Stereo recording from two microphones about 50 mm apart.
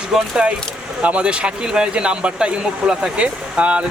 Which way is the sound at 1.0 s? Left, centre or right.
Right.